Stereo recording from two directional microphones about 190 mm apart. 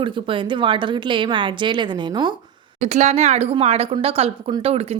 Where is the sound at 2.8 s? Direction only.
35° right (ahead or behind).